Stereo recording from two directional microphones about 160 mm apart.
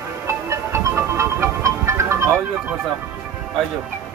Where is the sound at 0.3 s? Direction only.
15° right (ahead or behind).